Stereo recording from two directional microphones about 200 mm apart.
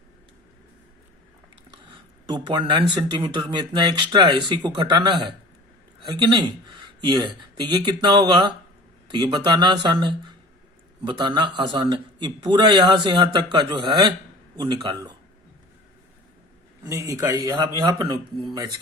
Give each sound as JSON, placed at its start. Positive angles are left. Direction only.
{"t": 2.2, "sound": "a man's voice", "side_deg": -20}
{"t": 16.8, "sound": "a man's voice", "side_deg": -15}